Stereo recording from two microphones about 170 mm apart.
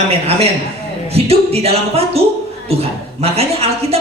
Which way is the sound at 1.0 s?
35° right (ahead or behind).